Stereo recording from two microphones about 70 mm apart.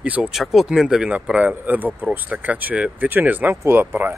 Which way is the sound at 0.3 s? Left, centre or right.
Centre.